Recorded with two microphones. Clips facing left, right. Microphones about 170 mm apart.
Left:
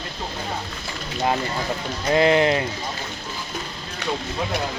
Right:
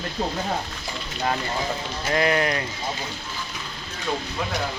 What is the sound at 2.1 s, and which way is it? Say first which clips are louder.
Speech: left 5 dB; 25° left (ahead or behind).